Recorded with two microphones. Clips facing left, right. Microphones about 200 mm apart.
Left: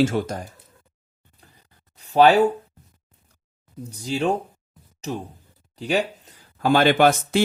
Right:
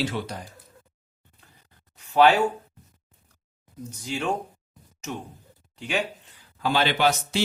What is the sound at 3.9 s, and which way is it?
Speech, 35° left (ahead or behind).